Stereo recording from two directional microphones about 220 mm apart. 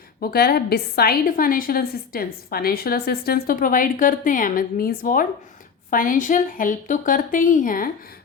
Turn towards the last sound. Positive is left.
turn(degrees=40)  # may be behind; listen again after turning